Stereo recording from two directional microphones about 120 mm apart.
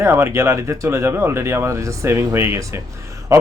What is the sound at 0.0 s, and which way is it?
Speech, 20° right (ahead or behind).